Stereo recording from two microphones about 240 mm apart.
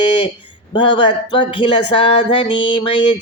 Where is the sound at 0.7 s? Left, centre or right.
Centre.